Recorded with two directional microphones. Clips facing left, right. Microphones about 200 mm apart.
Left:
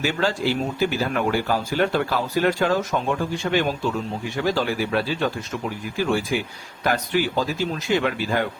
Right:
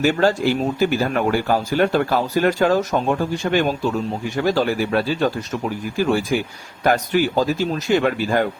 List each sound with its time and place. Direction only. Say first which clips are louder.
0.0 s speech: right 6 dB; 45° right (ahead or behind)